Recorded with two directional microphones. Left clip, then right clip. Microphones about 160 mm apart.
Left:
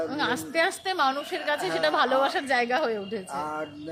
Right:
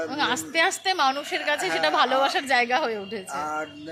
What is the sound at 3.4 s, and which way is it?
Speech, 30° left (ahead or behind).